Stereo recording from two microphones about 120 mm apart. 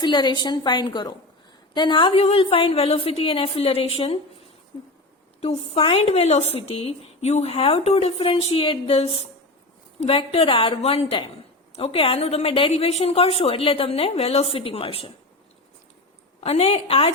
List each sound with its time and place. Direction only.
0.0 s a woman's voice: 40° left (ahead or behind)
5.4 s speech: 55° left (ahead or behind)
16.4 s a woman's voice: 55° left (ahead or behind)